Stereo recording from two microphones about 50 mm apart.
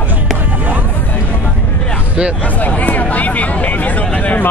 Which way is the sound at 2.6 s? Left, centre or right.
Left.